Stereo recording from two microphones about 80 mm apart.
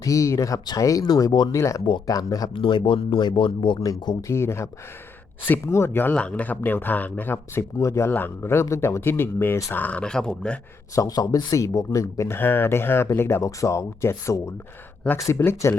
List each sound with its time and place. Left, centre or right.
0.0 s speech: left
1.5 s speech: left
2.0 s speech: left
2.5 s speech: left
4.3 s speech: left
6.1 s speech: centre
7.8 s speech: left
8.6 s speech: left
9.7 s speech: centre
10.9 s speech: left